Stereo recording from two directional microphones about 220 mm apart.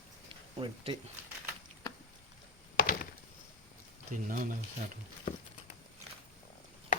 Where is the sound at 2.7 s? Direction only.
40° left (ahead or behind).